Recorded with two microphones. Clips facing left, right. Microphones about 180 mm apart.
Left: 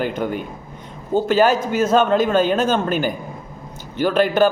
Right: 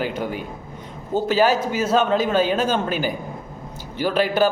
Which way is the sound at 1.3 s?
50° left (ahead or behind).